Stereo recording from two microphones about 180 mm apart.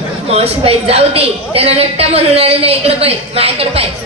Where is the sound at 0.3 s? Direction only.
35° right (ahead or behind).